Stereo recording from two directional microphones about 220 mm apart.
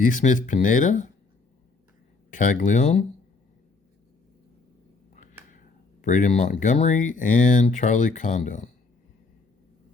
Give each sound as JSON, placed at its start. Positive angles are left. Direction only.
{"t": 0.0, "sound": "speech", "side_deg": 35}
{"t": 2.3, "sound": "speech", "side_deg": 35}
{"t": 5.1, "sound": "a sound", "side_deg": 35}
{"t": 6.0, "sound": "speech", "side_deg": 35}